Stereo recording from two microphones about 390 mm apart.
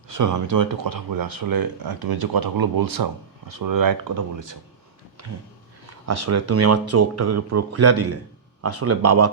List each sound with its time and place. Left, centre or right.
0.1 s speech: right
6.1 s speech: right